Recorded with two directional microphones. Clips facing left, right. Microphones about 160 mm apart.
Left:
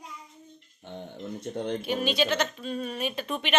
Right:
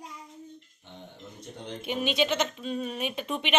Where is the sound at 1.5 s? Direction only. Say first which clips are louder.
Left 9 dB; 55° left (ahead or behind).